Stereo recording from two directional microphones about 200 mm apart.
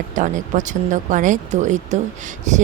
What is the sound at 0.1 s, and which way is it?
A woman's voice, 40° right (ahead or behind).